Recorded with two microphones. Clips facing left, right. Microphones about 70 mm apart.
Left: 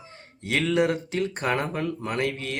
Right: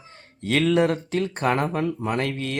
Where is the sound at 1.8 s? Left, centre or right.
Right.